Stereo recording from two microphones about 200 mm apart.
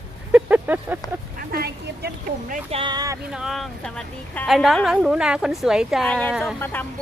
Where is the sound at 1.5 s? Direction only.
50° right (ahead or behind).